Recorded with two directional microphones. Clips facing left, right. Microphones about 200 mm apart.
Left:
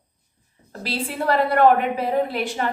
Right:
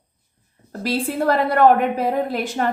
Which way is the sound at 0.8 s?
45° right (ahead or behind).